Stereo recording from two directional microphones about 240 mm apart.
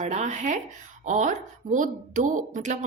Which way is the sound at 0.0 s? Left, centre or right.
Right.